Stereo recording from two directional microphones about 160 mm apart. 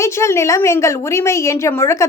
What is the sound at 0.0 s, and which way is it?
A woman's voice, 20° left (ahead or behind).